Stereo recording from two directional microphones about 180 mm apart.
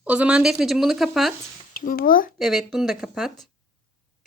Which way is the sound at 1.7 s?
50° left (ahead or behind).